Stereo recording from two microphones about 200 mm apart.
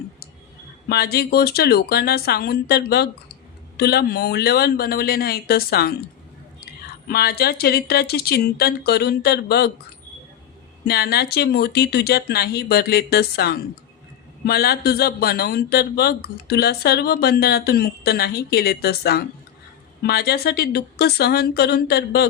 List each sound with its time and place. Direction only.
0.9 s a man's voice: 50° left (ahead or behind)
7.1 s a man's voice: 50° left (ahead or behind)
10.8 s a man's voice: 50° left (ahead or behind)